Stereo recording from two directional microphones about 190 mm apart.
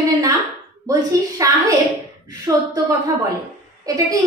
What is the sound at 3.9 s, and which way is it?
Speech, 20° right (ahead or behind).